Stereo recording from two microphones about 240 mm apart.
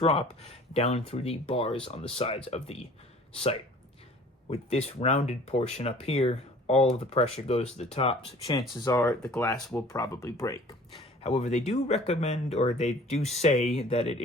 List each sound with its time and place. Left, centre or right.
0.0 s speech: left
8.7 s speech: centre
9.9 s speech: centre
11.2 s speech: left